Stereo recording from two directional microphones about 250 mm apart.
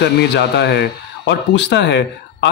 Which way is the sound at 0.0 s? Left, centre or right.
Left.